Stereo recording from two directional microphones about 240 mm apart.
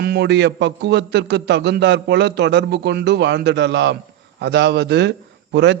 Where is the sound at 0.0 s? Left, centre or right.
Right.